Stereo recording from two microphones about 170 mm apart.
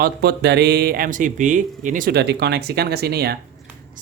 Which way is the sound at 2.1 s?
75° right (ahead or behind).